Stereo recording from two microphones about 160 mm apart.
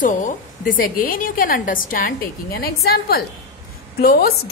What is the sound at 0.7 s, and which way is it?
A woman's voice, 60° left (ahead or behind).